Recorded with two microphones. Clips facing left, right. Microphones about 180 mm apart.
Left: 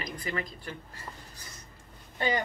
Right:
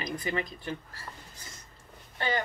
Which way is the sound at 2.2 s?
15° left (ahead or behind).